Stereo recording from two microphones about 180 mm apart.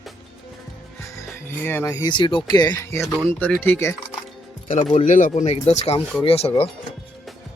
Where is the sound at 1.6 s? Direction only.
10° left (ahead or behind).